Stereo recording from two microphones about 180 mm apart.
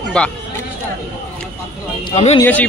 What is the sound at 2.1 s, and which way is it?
Speech, 35° left (ahead or behind).